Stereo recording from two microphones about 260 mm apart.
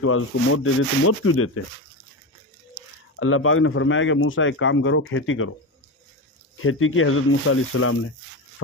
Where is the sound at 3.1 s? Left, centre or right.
Left.